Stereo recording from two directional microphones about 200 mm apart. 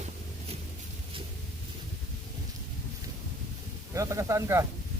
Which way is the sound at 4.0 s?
15° right (ahead or behind).